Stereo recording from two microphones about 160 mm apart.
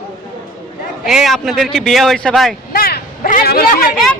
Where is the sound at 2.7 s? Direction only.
65° left (ahead or behind).